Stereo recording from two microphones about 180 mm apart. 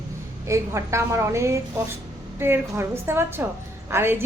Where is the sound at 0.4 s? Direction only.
15° right (ahead or behind).